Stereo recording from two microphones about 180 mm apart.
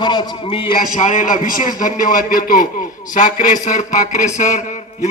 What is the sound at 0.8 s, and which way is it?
A man's voice, 50° left (ahead or behind).